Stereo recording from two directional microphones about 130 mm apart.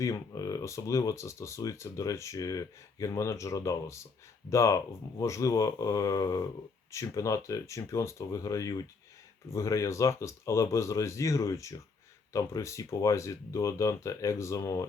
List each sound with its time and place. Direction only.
0.0 s speech: 25° left (ahead or behind)